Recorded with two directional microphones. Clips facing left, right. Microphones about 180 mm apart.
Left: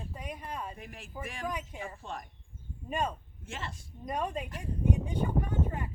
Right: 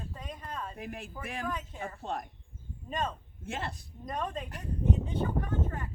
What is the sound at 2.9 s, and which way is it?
Speech, 10° left (ahead or behind).